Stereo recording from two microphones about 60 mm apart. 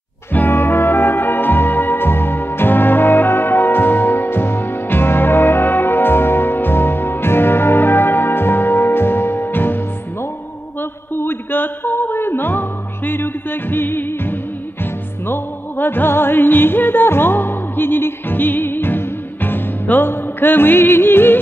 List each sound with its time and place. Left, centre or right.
0.3 s music: left
10.8 s a sound: left
15.2 s music: left